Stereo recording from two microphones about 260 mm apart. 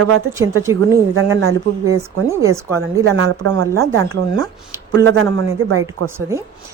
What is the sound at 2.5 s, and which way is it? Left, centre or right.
Speech, centre.